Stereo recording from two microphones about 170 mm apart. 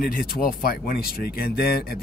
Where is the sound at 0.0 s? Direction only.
60° left (ahead or behind).